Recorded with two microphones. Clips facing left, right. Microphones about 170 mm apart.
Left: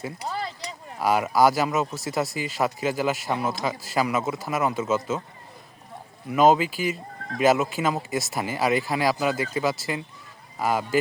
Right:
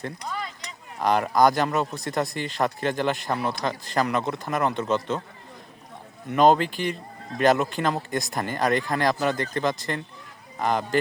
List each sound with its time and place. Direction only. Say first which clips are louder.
0.3 s a sound: left 4 dB; 30° left (ahead or behind)
0.9 s speech: even; 5° left (ahead or behind)
6.2 s speech: even; 5° left (ahead or behind)